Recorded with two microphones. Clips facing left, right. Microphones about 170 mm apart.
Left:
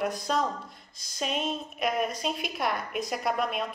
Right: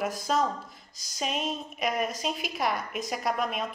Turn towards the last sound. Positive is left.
turn(degrees=0)  # may be behind; listen again after turning